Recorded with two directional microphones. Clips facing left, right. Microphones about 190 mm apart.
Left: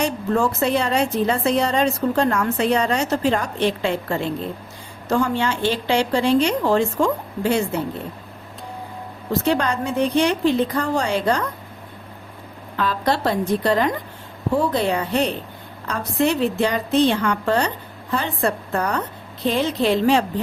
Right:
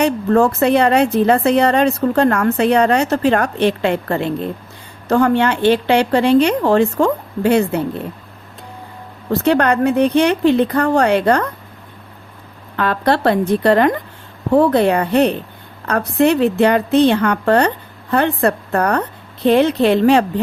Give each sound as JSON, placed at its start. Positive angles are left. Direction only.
{"t": 0.0, "sound": "a woman's voice", "side_deg": -60}
{"t": 9.3, "sound": "a woman's voice", "side_deg": -65}
{"t": 12.7, "sound": "a woman's voice", "side_deg": -60}